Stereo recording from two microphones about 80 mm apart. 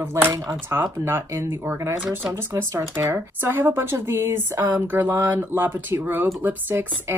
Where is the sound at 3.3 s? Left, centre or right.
Right.